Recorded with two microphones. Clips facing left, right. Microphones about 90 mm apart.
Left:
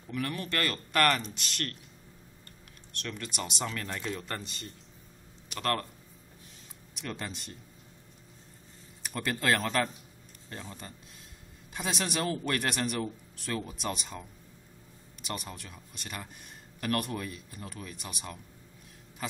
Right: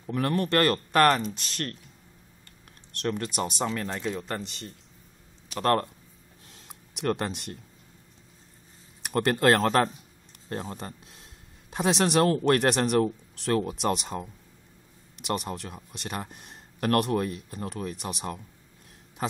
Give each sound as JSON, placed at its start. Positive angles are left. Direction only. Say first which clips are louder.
{"t": 0.0, "sound": "speech", "louder": "right 8 dB", "side_deg": -40}
{"t": 0.9, "sound": "speech", "louder": "right 5 dB", "side_deg": -30}
{"t": 2.9, "sound": "speech", "louder": "right 9 dB", "side_deg": -50}
{"t": 3.7, "sound": "speech", "louder": "right 5 dB", "side_deg": -25}
{"t": 5.5, "sound": "speech", "louder": "right 7 dB", "side_deg": -35}
{"t": 7.0, "sound": "speech", "louder": "right 10 dB", "side_deg": -55}
{"t": 9.0, "sound": "speech", "louder": "right 8 dB", "side_deg": -60}
{"t": 15.2, "sound": "speech", "louder": "right 9 dB", "side_deg": -60}
{"t": 16.1, "sound": "speech", "louder": "right 7 dB", "side_deg": -45}